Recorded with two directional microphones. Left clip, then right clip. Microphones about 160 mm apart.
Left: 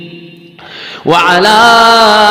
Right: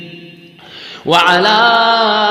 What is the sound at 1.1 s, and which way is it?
Mantra, 40° left (ahead or behind).